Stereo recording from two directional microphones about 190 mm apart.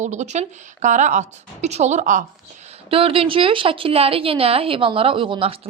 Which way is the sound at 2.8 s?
30° right (ahead or behind).